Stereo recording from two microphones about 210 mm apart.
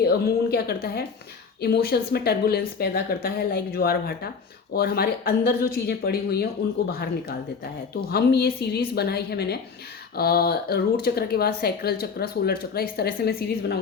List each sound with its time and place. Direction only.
0.1 s speech: 45° left (ahead or behind)
8.1 s speech: 50° left (ahead or behind)